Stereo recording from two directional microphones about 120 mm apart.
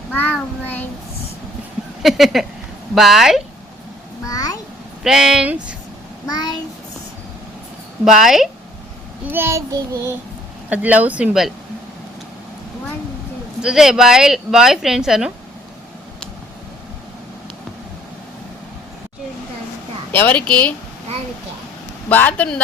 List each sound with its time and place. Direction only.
0.1 s child singing: 15° left (ahead or behind)
2.0 s speech: centre (ahead or behind)
4.3 s a sound: 30° left (ahead or behind)
5.0 s speech: 5° right (ahead or behind)
6.2 s a child's voice: 35° left (ahead or behind)
8.0 s speech: 5° right (ahead or behind)
9.2 s child singing: 20° right (ahead or behind)
10.7 s speech: 10° right (ahead or behind)
13.6 s speech: 5° right (ahead or behind)
20.1 s a woman's voice: 10° left (ahead or behind)
22.1 s a woman's voice: 15° left (ahead or behind)